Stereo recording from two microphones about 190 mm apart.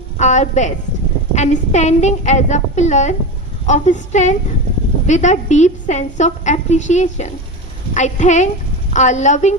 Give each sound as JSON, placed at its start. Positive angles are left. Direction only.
{"t": 0.2, "sound": "a woman's voice", "side_deg": 40}